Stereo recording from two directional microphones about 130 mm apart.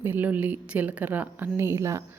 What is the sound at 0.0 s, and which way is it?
A woman's voice, 15° right (ahead or behind).